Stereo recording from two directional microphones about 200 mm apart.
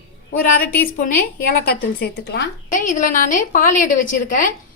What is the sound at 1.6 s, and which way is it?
A woman's voice, 50° left (ahead or behind).